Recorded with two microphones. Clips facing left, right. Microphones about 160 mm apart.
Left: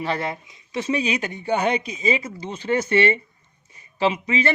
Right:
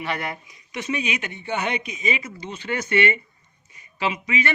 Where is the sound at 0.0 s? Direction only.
30° left (ahead or behind).